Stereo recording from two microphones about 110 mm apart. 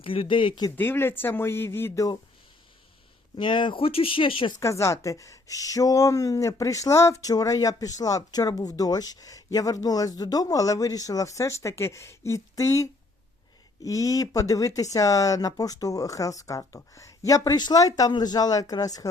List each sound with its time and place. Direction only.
0.0 s speech: 55° left (ahead or behind)
0.8 s speech: 20° left (ahead or behind)
3.3 s speech: 45° left (ahead or behind)
4.6 s speech: 25° left (ahead or behind)